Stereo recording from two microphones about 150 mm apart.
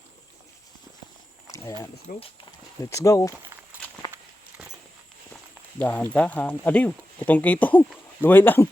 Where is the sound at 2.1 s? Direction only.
65° left (ahead or behind).